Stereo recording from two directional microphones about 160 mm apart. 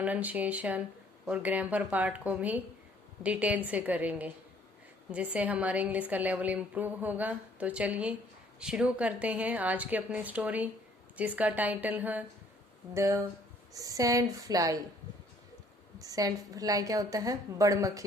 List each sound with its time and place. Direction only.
0.0 s a woman's voice: 10° right (ahead or behind)
16.0 s a woman's voice: 20° right (ahead or behind)